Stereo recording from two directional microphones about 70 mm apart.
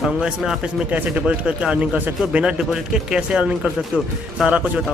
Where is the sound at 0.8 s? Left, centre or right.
Right.